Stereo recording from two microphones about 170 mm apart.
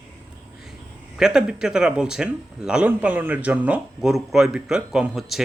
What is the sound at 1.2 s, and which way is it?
Speech, 5° right (ahead or behind).